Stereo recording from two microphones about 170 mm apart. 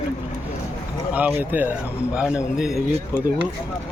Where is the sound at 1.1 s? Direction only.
10° right (ahead or behind).